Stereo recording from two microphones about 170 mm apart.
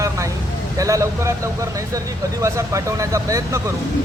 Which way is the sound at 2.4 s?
20° right (ahead or behind).